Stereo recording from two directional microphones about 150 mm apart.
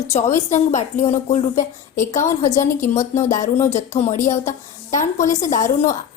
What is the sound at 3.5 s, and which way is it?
A woman's voice, 50° left (ahead or behind).